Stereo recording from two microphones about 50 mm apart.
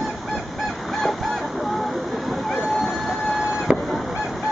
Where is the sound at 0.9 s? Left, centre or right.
Centre.